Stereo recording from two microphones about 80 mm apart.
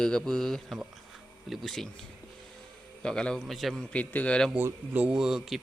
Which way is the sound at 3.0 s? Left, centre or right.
Centre.